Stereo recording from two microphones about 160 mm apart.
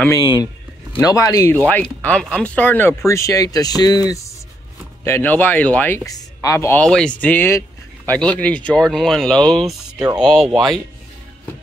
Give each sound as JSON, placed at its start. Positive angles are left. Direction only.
{"t": 0.0, "sound": "speech", "side_deg": 20}
{"t": 6.8, "sound": "speech", "side_deg": 5}
{"t": 9.9, "sound": "speech", "side_deg": -25}
{"t": 10.2, "sound": "speech", "side_deg": 0}